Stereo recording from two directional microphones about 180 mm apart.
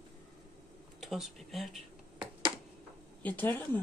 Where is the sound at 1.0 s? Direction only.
Centre (ahead or behind).